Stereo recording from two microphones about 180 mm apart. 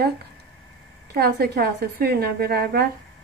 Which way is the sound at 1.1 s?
60° right (ahead or behind).